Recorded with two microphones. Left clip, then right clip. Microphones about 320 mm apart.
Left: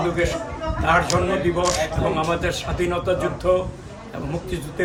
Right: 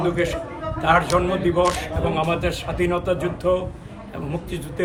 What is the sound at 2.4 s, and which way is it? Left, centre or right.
A man's voice, centre.